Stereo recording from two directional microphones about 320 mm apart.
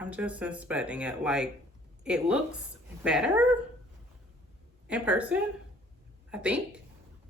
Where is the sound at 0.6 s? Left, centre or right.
Centre.